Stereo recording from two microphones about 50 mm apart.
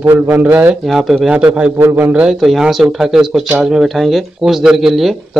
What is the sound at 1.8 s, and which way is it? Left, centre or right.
Speech, right.